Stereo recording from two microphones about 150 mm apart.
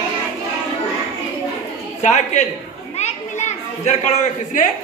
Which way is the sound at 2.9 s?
50° left (ahead or behind).